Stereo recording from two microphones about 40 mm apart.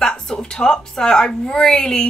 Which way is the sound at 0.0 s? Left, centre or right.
Centre.